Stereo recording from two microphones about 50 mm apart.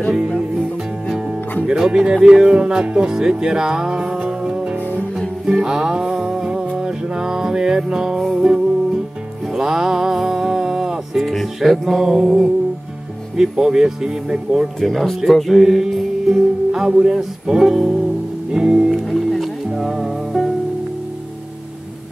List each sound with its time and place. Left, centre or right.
1.7 s speech: centre
5.4 s music: centre
11.1 s music: centre
13.4 s speech: centre
14.8 s music: centre
19.0 s music: centre